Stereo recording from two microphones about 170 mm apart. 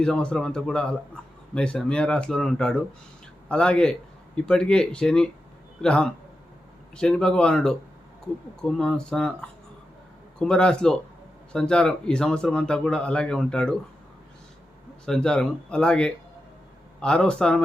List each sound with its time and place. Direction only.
0.0 s a man's voice: 5° left (ahead or behind)
15.0 s a man's voice: 5° left (ahead or behind)